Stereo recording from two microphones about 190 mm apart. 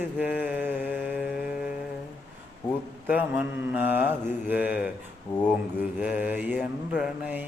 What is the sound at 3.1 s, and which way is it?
Mantra, 10° right (ahead or behind).